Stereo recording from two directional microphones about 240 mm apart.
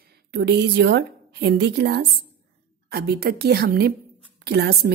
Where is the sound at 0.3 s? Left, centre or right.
Right.